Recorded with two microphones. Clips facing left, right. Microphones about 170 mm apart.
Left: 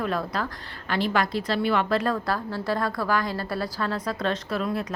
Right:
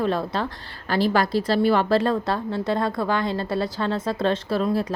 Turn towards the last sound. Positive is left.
turn(degrees=-30)  # may be behind; listen again after turning